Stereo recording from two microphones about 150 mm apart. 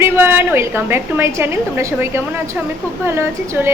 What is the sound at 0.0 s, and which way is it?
A woman's voice, 15° right (ahead or behind).